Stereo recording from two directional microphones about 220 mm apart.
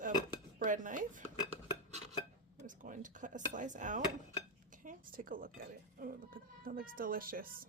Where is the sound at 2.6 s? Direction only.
35° right (ahead or behind).